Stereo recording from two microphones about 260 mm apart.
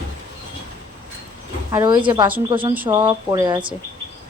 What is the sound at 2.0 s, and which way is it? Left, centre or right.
A woman's voice, centre.